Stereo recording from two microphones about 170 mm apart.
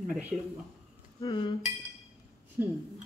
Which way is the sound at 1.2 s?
25° left (ahead or behind).